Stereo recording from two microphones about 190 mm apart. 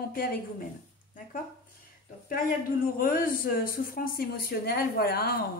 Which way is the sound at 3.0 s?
45° left (ahead or behind).